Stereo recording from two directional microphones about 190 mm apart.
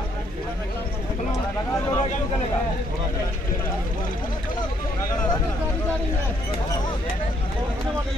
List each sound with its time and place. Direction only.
1.3 s speech: 15° left (ahead or behind)